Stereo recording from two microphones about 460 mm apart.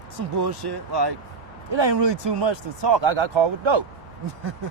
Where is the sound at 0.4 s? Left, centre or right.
Right.